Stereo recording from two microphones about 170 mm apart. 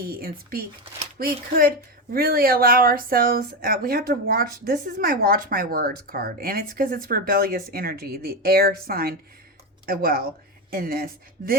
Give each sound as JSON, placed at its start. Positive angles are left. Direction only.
{"t": 0.0, "sound": "speech", "side_deg": -60}